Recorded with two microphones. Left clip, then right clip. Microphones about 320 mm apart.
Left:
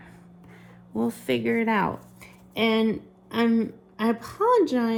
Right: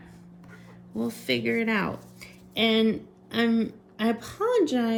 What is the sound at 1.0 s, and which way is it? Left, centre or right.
Speech, centre.